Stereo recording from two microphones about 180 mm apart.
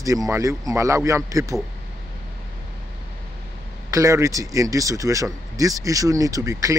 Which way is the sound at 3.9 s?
15° right (ahead or behind).